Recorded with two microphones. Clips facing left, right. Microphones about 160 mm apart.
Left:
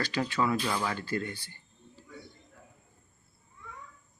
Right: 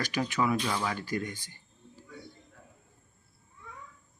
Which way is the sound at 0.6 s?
Centre (ahead or behind).